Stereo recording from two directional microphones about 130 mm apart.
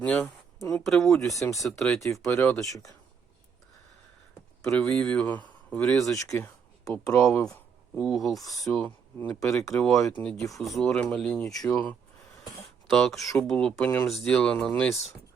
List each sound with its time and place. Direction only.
0.0 s speech: 10° left (ahead or behind)
1.3 s speech: 25° left (ahead or behind)
1.6 s speech: centre (ahead or behind)
2.3 s speech: 20° left (ahead or behind)
4.6 s speech: 5° left (ahead or behind)
6.1 s speech: 20° left (ahead or behind); by 8.9 s 5° left (ahead or behind)
9.1 s speech: 15° left (ahead or behind)
9.6 s speech: 5° left (ahead or behind)
10.1 s speech: 15° left (ahead or behind)
10.3 s speech: centre (ahead or behind)